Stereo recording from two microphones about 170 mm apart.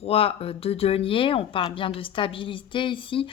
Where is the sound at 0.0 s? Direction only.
35° left (ahead or behind).